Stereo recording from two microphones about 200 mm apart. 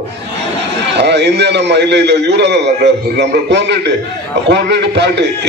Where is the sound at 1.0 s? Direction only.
60° right (ahead or behind).